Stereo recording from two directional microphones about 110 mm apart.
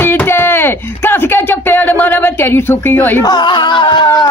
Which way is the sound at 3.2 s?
40° left (ahead or behind).